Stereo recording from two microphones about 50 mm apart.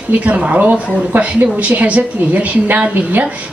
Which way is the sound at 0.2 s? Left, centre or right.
Right.